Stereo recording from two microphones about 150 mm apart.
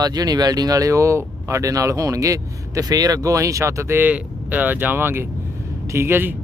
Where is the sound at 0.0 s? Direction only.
25° right (ahead or behind).